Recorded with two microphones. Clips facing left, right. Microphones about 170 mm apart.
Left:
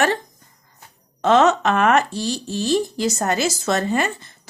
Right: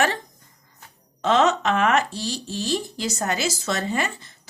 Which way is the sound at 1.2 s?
50° left (ahead or behind).